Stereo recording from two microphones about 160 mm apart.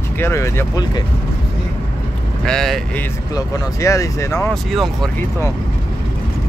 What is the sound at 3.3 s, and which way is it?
Speech, 20° left (ahead or behind).